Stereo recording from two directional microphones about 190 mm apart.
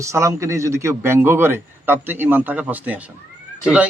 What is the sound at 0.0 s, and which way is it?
A man's voice, 15° right (ahead or behind).